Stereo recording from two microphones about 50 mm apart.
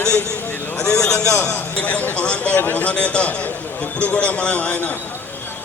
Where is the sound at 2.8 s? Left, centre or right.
Left.